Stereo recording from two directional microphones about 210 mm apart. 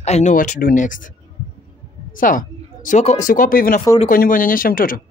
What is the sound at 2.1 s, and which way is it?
A woman's voice, 40° left (ahead or behind).